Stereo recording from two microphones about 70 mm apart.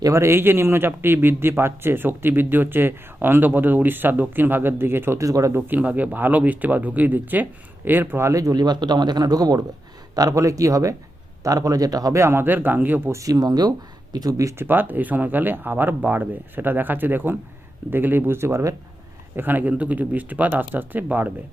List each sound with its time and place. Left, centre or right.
0.0 s speech: right
5.2 s speech: right
5.5 s speech: right
8.2 s speech: right
8.5 s speech: right
10.2 s speech: right
12.2 s speech: right
13.1 s speech: right
14.6 s speech: right
19.4 s speech: right